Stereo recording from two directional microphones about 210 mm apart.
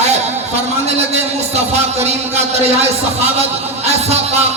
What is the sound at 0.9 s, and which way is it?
A man's voice, 30° right (ahead or behind).